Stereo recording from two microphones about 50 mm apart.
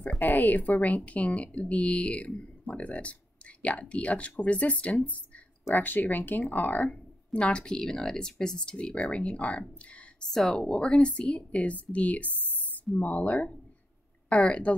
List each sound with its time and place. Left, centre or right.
0.2 s speech: left
5.8 s speech: left
7.3 s speech: left
10.3 s speech: centre
10.7 s speech: centre